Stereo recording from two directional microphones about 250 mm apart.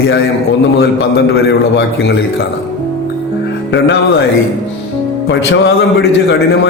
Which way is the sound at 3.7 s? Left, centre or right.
Left.